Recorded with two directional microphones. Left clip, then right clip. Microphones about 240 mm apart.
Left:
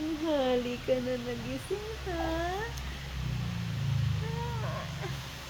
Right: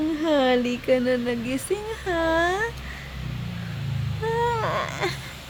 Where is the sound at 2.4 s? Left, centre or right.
Right.